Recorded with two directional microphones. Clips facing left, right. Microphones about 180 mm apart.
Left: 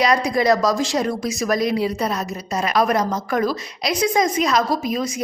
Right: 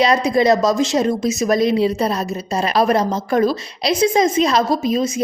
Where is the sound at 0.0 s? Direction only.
25° right (ahead or behind).